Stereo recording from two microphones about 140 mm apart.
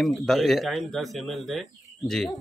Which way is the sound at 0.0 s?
Centre (ahead or behind).